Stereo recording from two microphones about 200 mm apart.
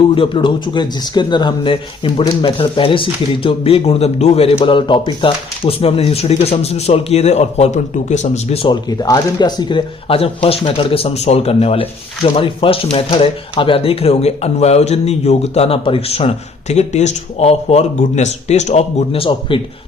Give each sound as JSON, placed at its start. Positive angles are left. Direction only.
{"t": 0.1, "sound": "speech", "side_deg": 25}